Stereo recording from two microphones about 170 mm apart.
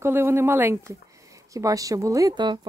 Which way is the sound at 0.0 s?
15° right (ahead or behind).